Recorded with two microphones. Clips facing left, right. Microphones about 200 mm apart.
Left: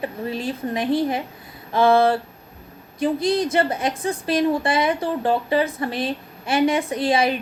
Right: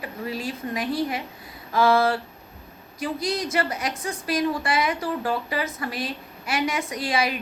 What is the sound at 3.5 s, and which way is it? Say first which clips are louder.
A woman's voice: left 5 dB; 30° left (ahead or behind).